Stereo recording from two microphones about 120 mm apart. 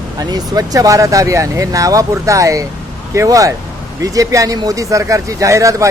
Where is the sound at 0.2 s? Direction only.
35° right (ahead or behind).